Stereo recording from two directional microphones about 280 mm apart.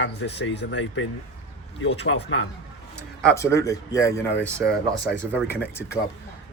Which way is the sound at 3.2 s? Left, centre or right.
Centre.